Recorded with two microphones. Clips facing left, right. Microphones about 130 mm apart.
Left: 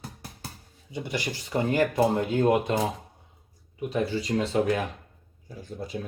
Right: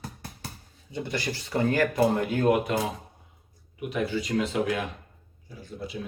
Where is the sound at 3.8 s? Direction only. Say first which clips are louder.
Left 1 dB; 30° left (ahead or behind).